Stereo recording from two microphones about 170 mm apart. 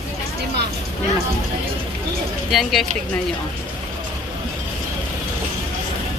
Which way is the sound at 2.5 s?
Centre (ahead or behind).